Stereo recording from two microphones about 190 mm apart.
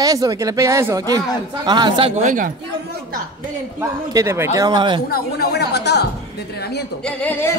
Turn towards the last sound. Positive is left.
turn(degrees=10)  # may be behind; listen again after turning